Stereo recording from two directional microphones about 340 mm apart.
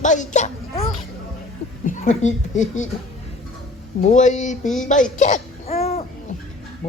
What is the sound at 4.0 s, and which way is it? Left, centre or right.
Speech, left.